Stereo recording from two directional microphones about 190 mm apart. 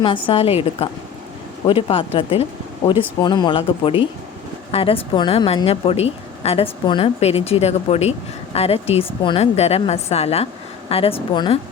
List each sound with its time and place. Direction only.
0.0 s a woman's voice: 30° left (ahead or behind)